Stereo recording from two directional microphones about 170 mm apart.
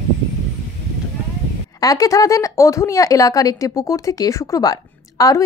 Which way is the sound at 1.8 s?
20° left (ahead or behind).